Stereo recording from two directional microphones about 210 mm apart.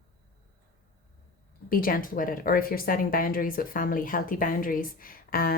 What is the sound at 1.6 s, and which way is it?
Speech, 45° left (ahead or behind).